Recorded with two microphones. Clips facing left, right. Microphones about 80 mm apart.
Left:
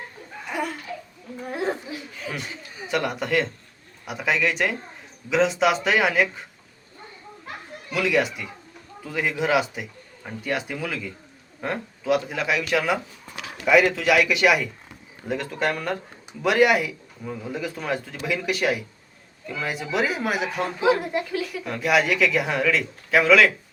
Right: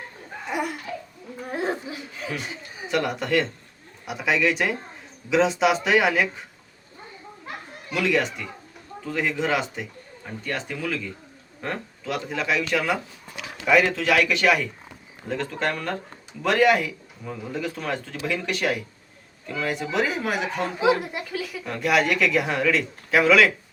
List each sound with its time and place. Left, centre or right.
0.5 s laughter: centre
2.9 s a woman's voice: centre
7.9 s a woman's voice: centre